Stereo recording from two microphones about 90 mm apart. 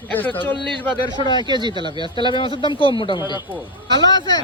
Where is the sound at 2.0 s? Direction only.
65° left (ahead or behind).